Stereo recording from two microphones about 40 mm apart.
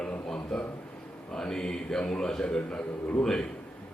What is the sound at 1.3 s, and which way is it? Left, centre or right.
A man's voice, centre.